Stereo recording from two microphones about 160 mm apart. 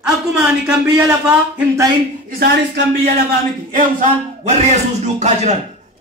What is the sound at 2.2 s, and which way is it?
Speech, 85° right.